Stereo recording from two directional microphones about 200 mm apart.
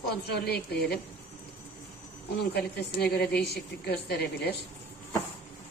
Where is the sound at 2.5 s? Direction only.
55° left (ahead or behind).